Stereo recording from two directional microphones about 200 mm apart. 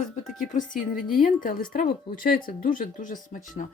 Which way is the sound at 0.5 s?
40° left (ahead or behind).